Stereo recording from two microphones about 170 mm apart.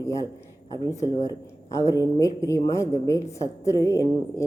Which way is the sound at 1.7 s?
20° left (ahead or behind).